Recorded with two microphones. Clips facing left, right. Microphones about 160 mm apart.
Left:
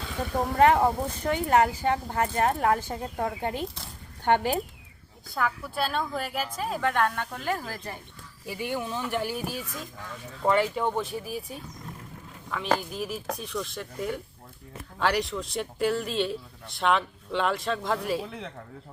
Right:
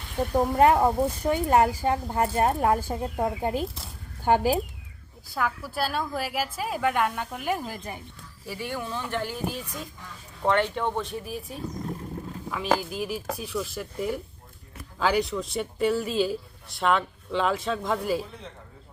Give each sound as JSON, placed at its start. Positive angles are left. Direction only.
{"t": 0.2, "sound": "speech", "side_deg": -5}
{"t": 8.4, "sound": "speech", "side_deg": 15}